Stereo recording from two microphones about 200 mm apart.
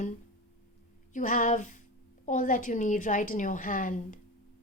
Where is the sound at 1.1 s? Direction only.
40° left (ahead or behind).